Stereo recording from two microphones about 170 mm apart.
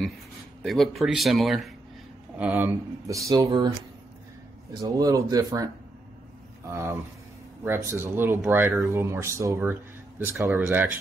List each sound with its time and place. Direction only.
0.6 s speech: centre (ahead or behind)
2.3 s speech: 10° right (ahead or behind)
4.8 s speech: 20° right (ahead or behind)
6.7 s speech: 15° right (ahead or behind)